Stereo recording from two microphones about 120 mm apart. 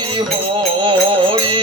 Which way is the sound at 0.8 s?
45° right (ahead or behind).